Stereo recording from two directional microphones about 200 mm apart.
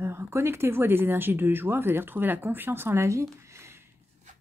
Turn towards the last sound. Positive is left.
turn(degrees=-15)  # may be behind; listen again after turning